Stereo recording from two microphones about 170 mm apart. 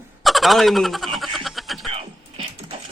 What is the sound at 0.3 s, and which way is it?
Fowl, centre (ahead or behind).